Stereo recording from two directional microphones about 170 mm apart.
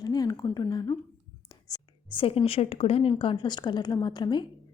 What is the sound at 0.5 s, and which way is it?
Speech, 20° left (ahead or behind).